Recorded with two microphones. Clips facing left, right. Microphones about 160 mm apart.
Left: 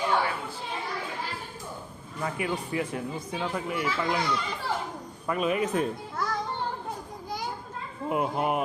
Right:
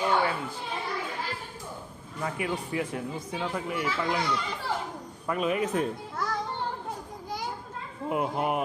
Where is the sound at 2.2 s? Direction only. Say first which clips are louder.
Left 1 dB; centre (ahead or behind).